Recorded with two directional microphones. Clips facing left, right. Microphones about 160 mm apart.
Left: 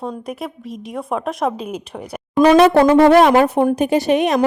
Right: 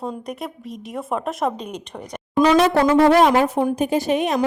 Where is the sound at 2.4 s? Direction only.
60° left (ahead or behind).